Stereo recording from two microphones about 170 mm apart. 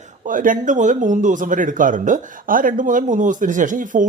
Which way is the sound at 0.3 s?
50° right (ahead or behind).